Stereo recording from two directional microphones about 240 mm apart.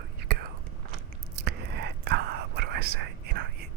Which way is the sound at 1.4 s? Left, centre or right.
Right.